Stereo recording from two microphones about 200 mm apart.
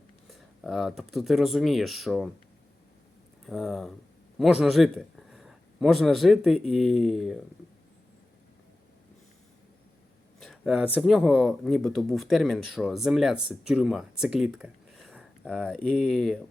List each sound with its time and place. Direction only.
0.3 s speech: centre (ahead or behind)
3.4 s a man's voice: centre (ahead or behind)
10.4 s a sound: centre (ahead or behind)
10.9 s speech: centre (ahead or behind)